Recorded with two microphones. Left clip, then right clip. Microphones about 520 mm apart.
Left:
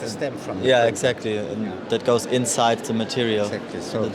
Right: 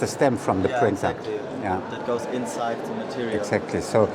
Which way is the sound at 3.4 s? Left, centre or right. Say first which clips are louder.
Right 2 dB; right.